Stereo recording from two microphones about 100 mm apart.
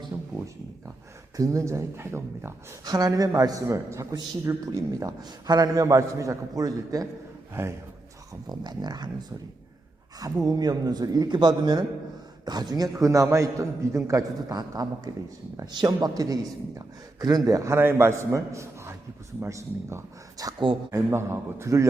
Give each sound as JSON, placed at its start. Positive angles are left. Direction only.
{"t": 0.1, "sound": "a sound", "side_deg": -25}
{"t": 1.4, "sound": "speech", "side_deg": -30}
{"t": 2.8, "sound": "a man's voice", "side_deg": -40}
{"t": 7.6, "sound": "speech", "side_deg": -25}
{"t": 8.3, "sound": "a sound", "side_deg": -45}
{"t": 10.4, "sound": "a man's voice", "side_deg": -40}